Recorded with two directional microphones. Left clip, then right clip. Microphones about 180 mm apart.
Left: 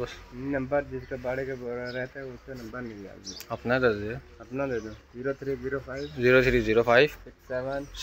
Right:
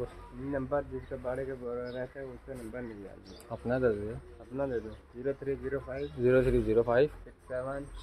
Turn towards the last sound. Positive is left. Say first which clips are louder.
# left 5 dB
turn(degrees=45)  # may be behind; listen again after turning